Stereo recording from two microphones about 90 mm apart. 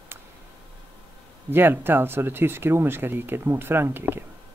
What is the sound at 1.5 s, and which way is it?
Speech, 25° right (ahead or behind).